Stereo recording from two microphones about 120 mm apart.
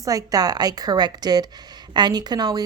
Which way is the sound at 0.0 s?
30° right (ahead or behind).